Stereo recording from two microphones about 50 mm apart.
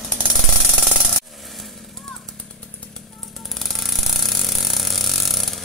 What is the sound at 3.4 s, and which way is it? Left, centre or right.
Ratchet, centre.